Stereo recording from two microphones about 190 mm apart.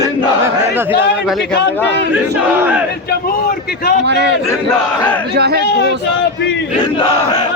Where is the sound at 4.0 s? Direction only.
65° right (ahead or behind).